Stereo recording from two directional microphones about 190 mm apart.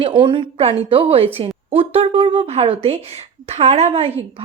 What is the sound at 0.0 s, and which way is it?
A woman's voice, 25° right (ahead or behind).